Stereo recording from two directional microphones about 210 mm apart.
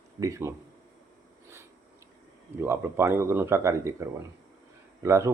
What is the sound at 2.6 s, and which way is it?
Speech, 10° right (ahead or behind).